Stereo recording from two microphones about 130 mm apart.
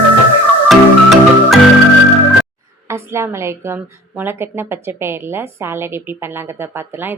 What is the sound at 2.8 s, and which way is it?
A woman's voice, 20° right (ahead or behind).